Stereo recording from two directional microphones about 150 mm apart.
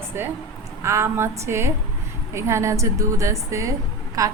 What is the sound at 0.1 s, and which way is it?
A woman's voice, 15° right (ahead or behind).